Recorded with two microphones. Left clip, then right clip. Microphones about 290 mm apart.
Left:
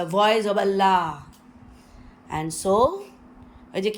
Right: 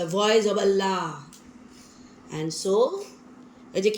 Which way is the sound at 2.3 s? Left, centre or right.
Centre.